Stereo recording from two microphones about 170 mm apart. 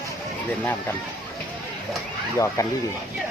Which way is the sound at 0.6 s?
10° left (ahead or behind).